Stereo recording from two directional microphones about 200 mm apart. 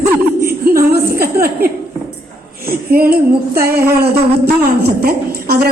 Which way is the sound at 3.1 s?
50° right (ahead or behind).